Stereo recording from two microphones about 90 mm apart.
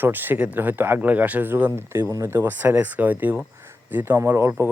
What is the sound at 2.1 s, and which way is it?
Speech, 35° right (ahead or behind).